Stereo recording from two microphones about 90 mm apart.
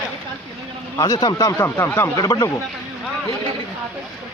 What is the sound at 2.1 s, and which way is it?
Speech, 40° left (ahead or behind).